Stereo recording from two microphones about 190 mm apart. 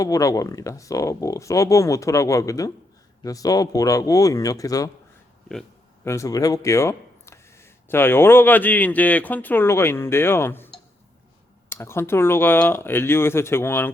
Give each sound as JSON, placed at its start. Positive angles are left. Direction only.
{"t": 0.0, "sound": "speech", "side_deg": 15}
{"t": 6.1, "sound": "speech", "side_deg": 15}
{"t": 11.7, "sound": "speech", "side_deg": 15}